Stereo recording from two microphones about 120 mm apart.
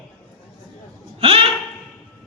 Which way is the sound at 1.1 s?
55° right (ahead or behind).